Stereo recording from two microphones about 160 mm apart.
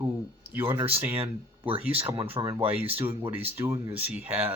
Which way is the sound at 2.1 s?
30° right (ahead or behind).